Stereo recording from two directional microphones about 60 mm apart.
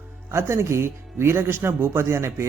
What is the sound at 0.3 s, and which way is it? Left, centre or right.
Speech, right.